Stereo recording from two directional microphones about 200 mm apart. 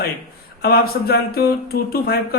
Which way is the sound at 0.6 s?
50° left (ahead or behind).